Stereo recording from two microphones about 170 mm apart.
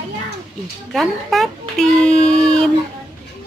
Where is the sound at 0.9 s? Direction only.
Centre (ahead or behind).